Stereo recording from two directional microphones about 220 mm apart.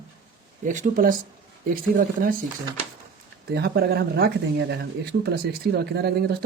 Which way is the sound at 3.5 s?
45° right (ahead or behind).